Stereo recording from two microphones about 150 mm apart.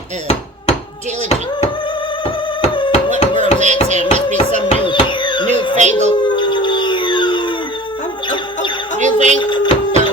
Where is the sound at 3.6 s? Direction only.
50° right (ahead or behind).